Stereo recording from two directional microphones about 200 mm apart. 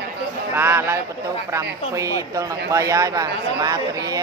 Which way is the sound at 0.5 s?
10° right (ahead or behind).